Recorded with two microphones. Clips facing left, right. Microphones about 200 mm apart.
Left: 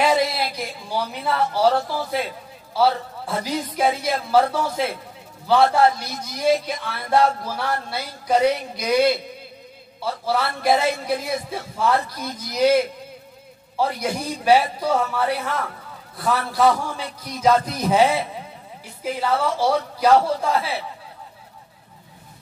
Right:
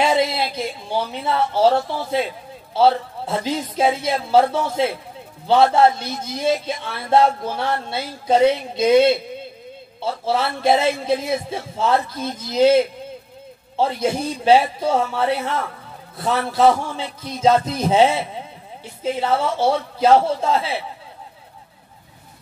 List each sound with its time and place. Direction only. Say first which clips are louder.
0.0 s a man's voice: right 1 dB; 25° right (ahead or behind)